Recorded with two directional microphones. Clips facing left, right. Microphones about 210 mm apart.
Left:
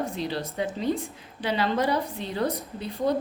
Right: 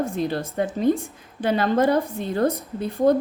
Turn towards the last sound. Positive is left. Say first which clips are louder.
# right 7 dB
turn(degrees=-50)  # may be behind; listen again after turning